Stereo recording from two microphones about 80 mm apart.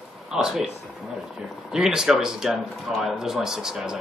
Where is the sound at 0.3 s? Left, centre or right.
Centre.